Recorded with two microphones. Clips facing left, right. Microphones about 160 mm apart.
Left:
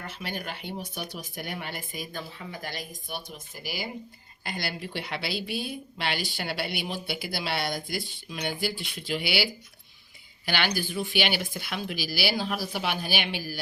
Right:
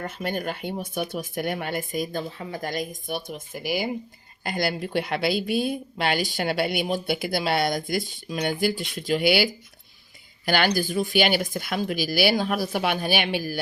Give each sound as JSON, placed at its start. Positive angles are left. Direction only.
{"t": 0.0, "sound": "a woman's voice", "side_deg": -45}